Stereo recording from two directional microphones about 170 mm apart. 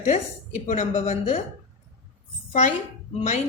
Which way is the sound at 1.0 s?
35° left (ahead or behind).